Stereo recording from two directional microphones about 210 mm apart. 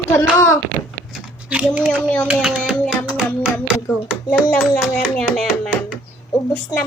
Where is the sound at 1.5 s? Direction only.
5° right (ahead or behind).